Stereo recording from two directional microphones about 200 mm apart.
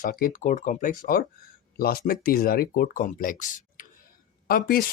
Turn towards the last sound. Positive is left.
turn(degrees=45)  # may be behind; listen again after turning